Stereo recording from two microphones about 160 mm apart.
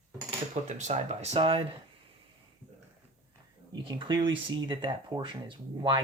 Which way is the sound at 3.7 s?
30° right (ahead or behind).